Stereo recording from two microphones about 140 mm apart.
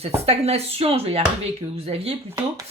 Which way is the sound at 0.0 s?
45° right (ahead or behind).